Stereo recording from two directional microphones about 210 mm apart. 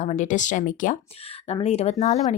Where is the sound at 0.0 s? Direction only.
35° left (ahead or behind).